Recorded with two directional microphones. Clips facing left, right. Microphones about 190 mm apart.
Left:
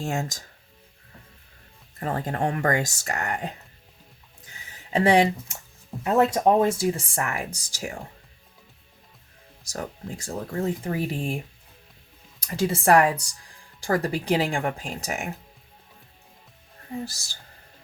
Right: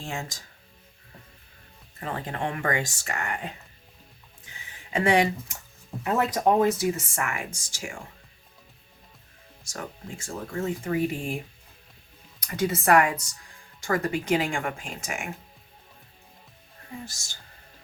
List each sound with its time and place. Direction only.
0.0 s speech: 45° left (ahead or behind)
2.0 s speech: 40° left (ahead or behind)
4.9 s speech: 35° left (ahead or behind)
10.2 s speech: 35° left (ahead or behind)
12.4 s speech: 30° left (ahead or behind)
17.1 s speech: 35° left (ahead or behind)